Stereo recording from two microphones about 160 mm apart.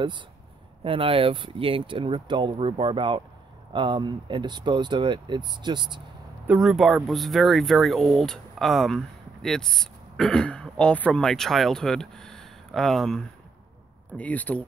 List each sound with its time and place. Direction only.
0.8 s speech: 35° right (ahead or behind)
6.4 s speech: centre (ahead or behind)